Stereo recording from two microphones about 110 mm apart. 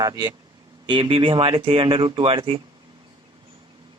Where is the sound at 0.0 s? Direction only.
35° right (ahead or behind).